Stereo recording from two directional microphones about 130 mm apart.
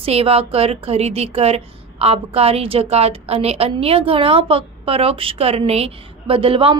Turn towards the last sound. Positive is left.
turn(degrees=-45)  # may be behind; listen again after turning